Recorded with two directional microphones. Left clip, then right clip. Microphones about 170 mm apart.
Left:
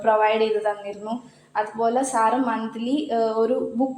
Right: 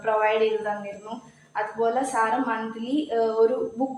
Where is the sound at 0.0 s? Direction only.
45° left (ahead or behind).